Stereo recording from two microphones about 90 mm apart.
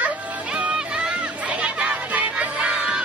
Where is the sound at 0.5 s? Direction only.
10° right (ahead or behind).